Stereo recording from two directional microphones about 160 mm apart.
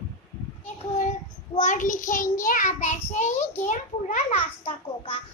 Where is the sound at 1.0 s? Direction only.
50° left (ahead or behind).